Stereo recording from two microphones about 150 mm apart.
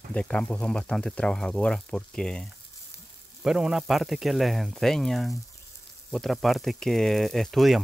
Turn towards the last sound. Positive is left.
turn(degrees=0)  # may be behind; listen again after turning